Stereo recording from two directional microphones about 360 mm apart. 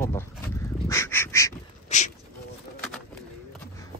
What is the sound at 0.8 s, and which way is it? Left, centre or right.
Bird, centre.